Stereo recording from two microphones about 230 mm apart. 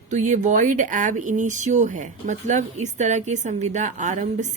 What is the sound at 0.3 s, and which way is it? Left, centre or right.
Speech, right.